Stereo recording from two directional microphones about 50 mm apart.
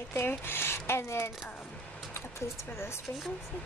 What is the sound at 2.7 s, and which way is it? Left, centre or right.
Speech, left.